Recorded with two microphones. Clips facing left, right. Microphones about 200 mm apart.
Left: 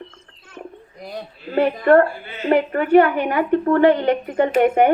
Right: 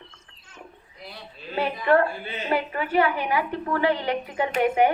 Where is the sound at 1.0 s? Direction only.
45° left (ahead or behind).